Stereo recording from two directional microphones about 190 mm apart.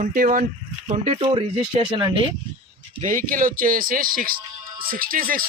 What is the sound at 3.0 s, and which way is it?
Speech, 45° right (ahead or behind).